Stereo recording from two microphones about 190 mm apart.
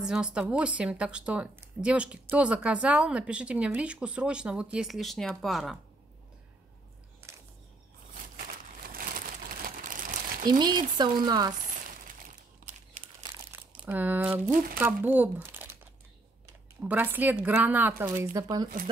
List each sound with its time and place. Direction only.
0.0 s a woman's voice: 5° right (ahead or behind)
8.4 s crumpling: 45° right (ahead or behind)
10.5 s speech: 20° right (ahead or behind)
11.6 s crumpling: 40° right (ahead or behind)
13.5 s speech: 10° right (ahead or behind)
16.8 s speech: 10° right (ahead or behind)